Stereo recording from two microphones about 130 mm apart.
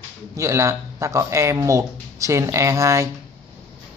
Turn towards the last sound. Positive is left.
turn(degrees=-25)  # may be behind; listen again after turning